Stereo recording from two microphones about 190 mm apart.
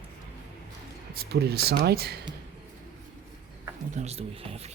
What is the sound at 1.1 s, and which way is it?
Speech, 55° right (ahead or behind).